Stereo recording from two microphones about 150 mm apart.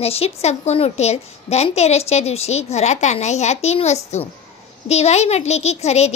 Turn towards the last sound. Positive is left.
turn(degrees=45)  # may be behind; listen again after turning